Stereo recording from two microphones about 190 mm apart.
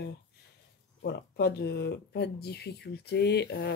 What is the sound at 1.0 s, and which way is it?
Speech, 60° left (ahead or behind).